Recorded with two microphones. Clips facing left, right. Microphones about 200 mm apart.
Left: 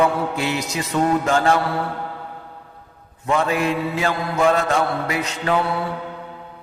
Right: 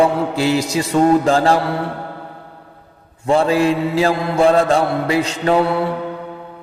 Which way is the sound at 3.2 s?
30° right (ahead or behind).